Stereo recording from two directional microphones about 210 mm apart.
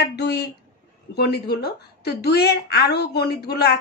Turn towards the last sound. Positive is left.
turn(degrees=50)  # may be behind; listen again after turning